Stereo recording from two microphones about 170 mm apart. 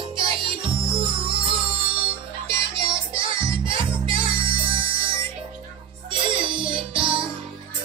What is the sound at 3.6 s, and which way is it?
Music, 30° right (ahead or behind).